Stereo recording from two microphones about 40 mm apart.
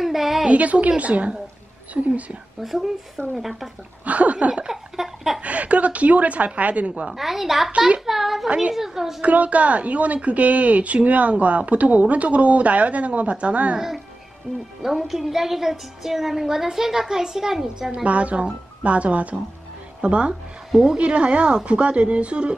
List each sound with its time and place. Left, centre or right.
0.0 s a sound: centre
0.5 s speech: right
2.6 s a woman's voice: centre
4.0 s speech: right
4.6 s a sound: centre
5.4 s speech: right
7.2 s speech: centre
8.0 s a sound: centre
8.7 s a woman's voice: centre
9.2 s speech: right
13.7 s a woman's voice: centre
18.0 s a woman's voice: right
20.7 s a woman's voice: centre
21.0 s a woman's voice: right